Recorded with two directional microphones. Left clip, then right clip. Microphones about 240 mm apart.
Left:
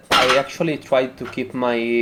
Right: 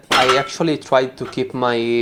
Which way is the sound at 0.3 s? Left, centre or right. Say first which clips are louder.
Right 1 dB; right.